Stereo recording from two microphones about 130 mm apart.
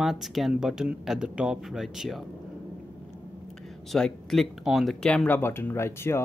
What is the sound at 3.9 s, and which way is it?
Speech, 5° left (ahead or behind).